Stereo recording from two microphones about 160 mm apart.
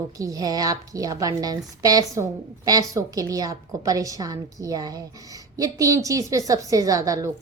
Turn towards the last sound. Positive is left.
turn(degrees=-20)  # may be behind; listen again after turning